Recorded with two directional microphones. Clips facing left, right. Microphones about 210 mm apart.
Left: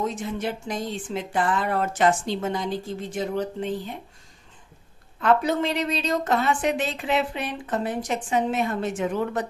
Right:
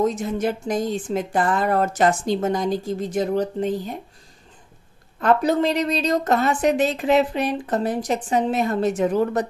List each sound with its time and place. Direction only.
0.0 s speech: 40° right (ahead or behind)
5.2 s speech: 40° right (ahead or behind)